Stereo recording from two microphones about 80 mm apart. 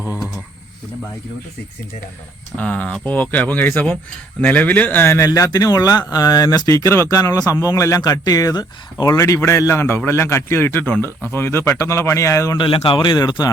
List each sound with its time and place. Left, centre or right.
2.6 s speech: centre; by 5.3 s left
5.3 s a man's voice: left
12.5 s speech: left